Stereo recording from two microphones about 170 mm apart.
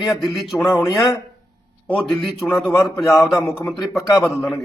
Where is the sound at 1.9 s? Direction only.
10° left (ahead or behind).